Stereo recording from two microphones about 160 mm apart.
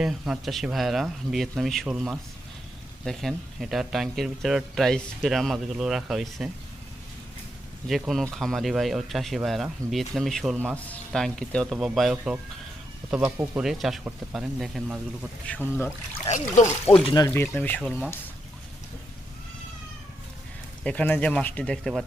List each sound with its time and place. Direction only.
0.0 s speech: 5° right (ahead or behind)
7.9 s speech: centre (ahead or behind)
15.5 s speech: 10° left (ahead or behind)
16.9 s speech: 30° left (ahead or behind)
17.3 s speech: 15° left (ahead or behind)
20.8 s speech: 10° left (ahead or behind)